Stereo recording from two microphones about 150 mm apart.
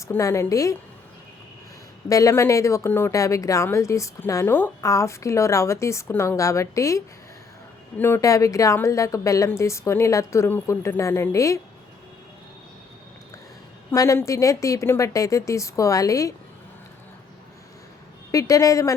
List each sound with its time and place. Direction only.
0.1 s speech: 20° left (ahead or behind)
2.0 s speech: 20° left (ahead or behind)
13.9 s speech: 20° left (ahead or behind)
18.3 s speech: 20° left (ahead or behind)